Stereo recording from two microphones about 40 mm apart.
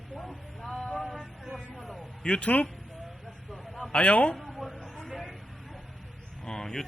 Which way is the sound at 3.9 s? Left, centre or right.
Left.